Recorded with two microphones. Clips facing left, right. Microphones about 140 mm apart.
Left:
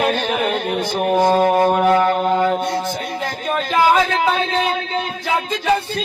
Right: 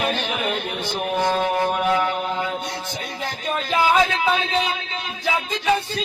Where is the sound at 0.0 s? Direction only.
45° left (ahead or behind).